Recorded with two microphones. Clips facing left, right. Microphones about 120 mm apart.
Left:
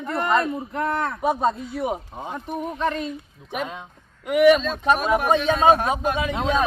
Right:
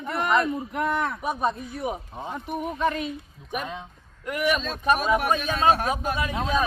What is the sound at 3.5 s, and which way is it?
Speech, 20° left (ahead or behind).